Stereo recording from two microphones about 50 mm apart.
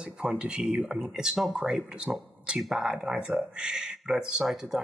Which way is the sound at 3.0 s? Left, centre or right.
Right.